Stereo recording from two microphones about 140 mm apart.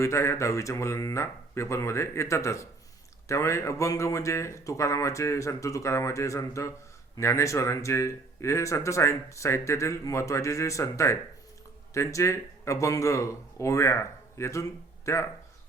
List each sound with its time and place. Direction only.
0.0 s speech: 20° left (ahead or behind)